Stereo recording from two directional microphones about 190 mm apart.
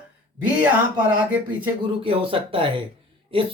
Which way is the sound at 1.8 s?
30° right (ahead or behind).